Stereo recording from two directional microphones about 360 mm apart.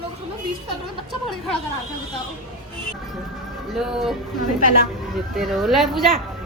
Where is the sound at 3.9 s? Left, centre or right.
Centre.